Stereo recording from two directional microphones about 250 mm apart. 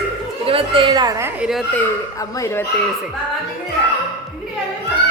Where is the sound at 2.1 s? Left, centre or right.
Centre.